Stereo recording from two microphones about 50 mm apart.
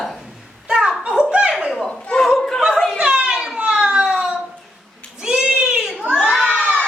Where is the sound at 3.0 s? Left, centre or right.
Centre.